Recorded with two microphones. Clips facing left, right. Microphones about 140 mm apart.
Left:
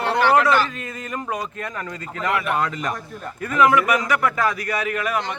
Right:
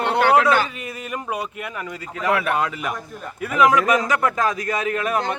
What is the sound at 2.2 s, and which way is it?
Speech, 10° right (ahead or behind).